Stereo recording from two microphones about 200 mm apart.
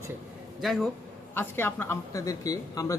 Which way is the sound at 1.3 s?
10° left (ahead or behind).